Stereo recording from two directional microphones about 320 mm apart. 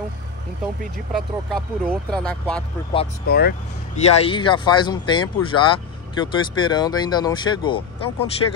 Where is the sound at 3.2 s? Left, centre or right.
Left.